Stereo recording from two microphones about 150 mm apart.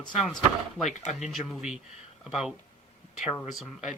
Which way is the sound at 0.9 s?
50° left (ahead or behind).